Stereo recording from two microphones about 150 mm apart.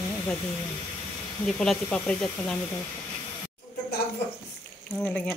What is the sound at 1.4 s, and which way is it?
Speech, 5° left (ahead or behind).